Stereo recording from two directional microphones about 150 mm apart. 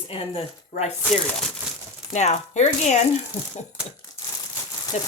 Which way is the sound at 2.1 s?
50° left (ahead or behind).